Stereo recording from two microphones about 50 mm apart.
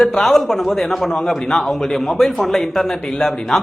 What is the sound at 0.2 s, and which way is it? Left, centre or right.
A man's voice, centre.